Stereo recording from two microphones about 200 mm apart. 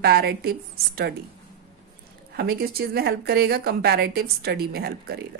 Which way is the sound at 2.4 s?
50° right (ahead or behind).